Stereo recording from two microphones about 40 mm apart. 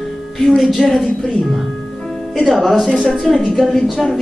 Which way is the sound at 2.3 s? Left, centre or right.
Centre.